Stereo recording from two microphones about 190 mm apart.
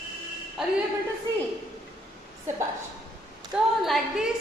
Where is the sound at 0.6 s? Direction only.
Centre (ahead or behind).